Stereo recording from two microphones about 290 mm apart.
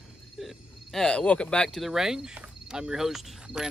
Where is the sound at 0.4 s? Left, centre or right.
Centre.